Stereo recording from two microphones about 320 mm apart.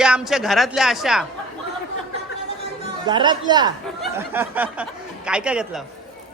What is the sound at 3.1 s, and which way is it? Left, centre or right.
A man's voice, centre.